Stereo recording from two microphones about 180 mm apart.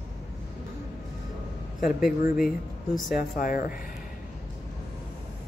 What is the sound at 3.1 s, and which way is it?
Speech, 50° left (ahead or behind).